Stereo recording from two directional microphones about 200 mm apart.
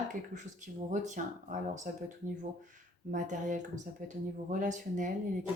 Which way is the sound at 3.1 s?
40° right (ahead or behind).